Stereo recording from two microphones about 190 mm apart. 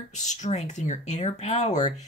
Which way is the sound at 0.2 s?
40° left (ahead or behind).